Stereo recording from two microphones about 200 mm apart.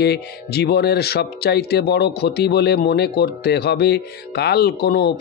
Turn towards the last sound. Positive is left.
turn(degrees=55)  # may be behind; listen again after turning